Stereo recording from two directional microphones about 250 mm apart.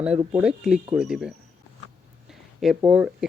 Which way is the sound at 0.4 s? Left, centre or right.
Centre.